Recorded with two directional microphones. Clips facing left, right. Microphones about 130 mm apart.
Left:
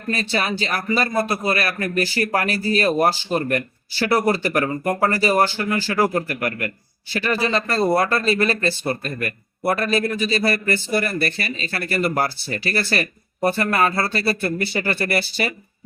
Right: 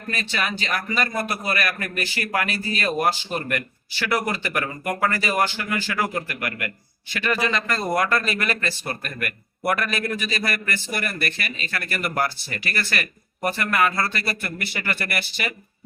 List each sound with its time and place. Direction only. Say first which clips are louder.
0.1 s speech: left 5 dB; 35° left (ahead or behind)